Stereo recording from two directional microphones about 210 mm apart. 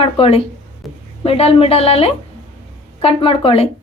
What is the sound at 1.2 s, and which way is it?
Speech, 30° left (ahead or behind).